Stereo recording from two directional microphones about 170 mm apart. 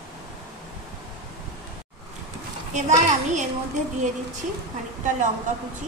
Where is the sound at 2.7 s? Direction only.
45° right (ahead or behind).